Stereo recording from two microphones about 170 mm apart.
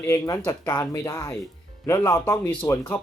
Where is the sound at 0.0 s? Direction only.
15° left (ahead or behind).